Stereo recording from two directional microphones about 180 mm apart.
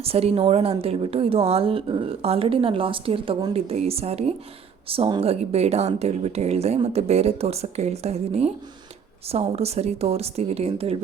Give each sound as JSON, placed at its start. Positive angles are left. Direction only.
{"t": 0.0, "sound": "a woman's voice", "side_deg": -35}